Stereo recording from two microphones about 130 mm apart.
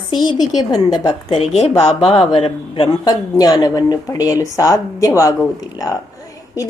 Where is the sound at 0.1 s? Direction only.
35° left (ahead or behind).